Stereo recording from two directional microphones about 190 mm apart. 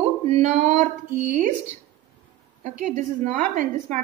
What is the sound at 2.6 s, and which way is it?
A woman's voice, 40° right (ahead or behind).